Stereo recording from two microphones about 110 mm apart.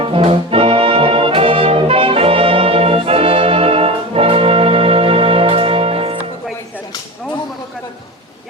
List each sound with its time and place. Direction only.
0.0 s brass instrument: 55° right (ahead or behind)